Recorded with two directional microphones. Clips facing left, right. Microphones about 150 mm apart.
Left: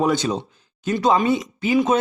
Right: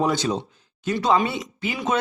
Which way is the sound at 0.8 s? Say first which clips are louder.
Left 2 dB; 50° left (ahead or behind).